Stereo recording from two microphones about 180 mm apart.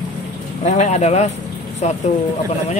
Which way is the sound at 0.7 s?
40° left (ahead or behind).